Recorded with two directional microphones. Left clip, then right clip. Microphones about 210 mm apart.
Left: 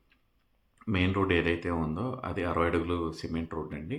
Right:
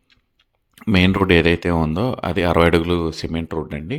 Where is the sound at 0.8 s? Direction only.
45° right (ahead or behind).